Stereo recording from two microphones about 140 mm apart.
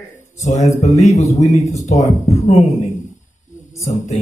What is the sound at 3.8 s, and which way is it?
Mantra, 60° left (ahead or behind).